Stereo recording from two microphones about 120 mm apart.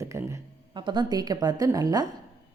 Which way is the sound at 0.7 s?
40° right (ahead or behind).